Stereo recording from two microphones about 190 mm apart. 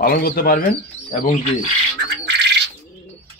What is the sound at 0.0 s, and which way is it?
Speech, 50° left (ahead or behind).